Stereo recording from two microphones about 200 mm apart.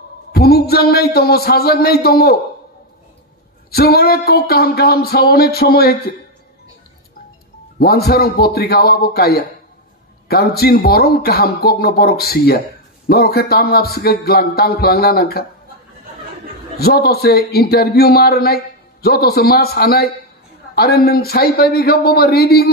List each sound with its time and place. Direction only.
0.3 s speech: 50° left (ahead or behind)
3.7 s speech: 50° left (ahead or behind)
7.8 s speech: 50° left (ahead or behind)
16.7 s speech: 50° left (ahead or behind)